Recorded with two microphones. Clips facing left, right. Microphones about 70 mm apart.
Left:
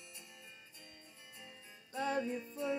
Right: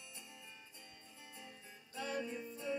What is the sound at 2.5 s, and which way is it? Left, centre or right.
Music, left.